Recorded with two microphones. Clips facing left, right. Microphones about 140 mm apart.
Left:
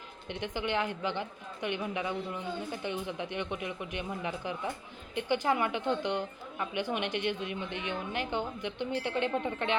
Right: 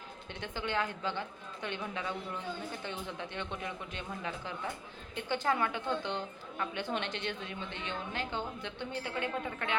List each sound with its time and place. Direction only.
0.3 s a woman's voice: 15° left (ahead or behind)